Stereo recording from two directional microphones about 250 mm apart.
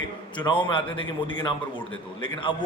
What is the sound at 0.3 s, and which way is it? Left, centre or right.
Speech, centre.